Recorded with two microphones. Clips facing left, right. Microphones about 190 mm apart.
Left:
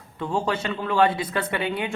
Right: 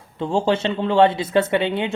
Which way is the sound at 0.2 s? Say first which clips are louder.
Right 6 dB; 25° right (ahead or behind).